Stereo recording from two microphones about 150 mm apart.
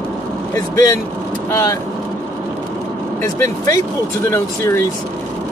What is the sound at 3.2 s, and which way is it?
Speech, 20° left (ahead or behind).